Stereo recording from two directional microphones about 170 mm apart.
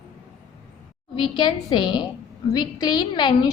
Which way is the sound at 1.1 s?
30° left (ahead or behind).